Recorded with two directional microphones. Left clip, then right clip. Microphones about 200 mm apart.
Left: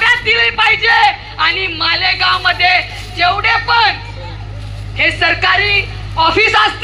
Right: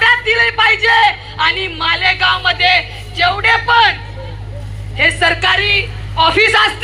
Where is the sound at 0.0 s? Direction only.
10° right (ahead or behind).